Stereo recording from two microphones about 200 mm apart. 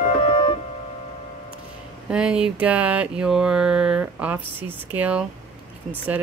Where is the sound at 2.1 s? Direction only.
5° right (ahead or behind).